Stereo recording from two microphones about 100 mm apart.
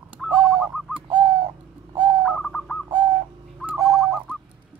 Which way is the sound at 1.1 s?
50° right (ahead or behind).